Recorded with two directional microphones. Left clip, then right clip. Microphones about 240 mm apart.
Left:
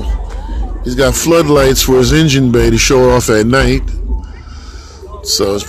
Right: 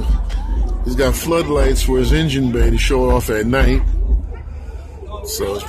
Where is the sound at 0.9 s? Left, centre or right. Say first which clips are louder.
Left 7 dB; centre.